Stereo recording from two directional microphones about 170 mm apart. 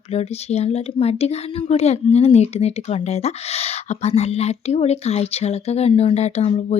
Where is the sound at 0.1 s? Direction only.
40° left (ahead or behind).